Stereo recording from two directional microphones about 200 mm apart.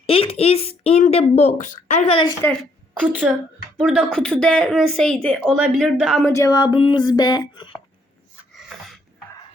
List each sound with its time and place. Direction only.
0.0 s speech: 30° left (ahead or behind)
2.4 s a woman's voice: 10° left (ahead or behind)
3.0 s a woman's voice: 5° right (ahead or behind)
6.3 s speech: 15° left (ahead or behind)
8.5 s snort: centre (ahead or behind)